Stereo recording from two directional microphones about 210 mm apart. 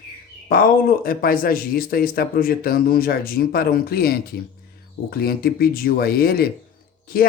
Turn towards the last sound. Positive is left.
turn(degrees=45)  # may be behind; listen again after turning